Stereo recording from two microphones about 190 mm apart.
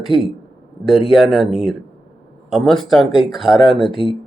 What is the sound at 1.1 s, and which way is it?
Speech, centre (ahead or behind).